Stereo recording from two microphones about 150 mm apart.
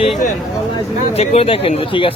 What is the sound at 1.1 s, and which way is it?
Speech, 45° left (ahead or behind).